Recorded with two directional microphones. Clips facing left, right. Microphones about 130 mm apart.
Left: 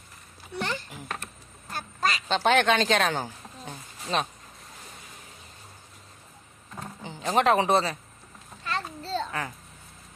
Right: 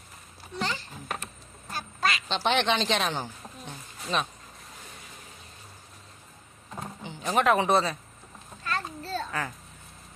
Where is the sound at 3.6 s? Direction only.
35° left (ahead or behind).